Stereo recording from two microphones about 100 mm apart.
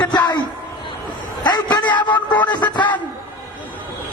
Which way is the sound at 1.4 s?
45° left (ahead or behind).